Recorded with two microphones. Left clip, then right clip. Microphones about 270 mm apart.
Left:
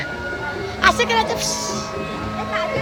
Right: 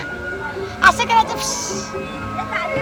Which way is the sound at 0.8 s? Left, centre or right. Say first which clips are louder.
Right 3 dB; centre.